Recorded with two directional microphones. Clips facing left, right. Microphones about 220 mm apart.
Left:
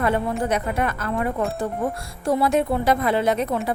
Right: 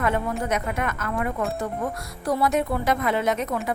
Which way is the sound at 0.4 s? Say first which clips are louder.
Left 3 dB; 30° left (ahead or behind).